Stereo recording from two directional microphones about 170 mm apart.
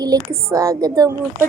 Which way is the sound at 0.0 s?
20° right (ahead or behind).